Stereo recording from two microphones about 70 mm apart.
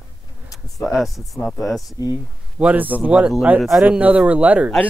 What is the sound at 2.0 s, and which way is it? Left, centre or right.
Speech, left.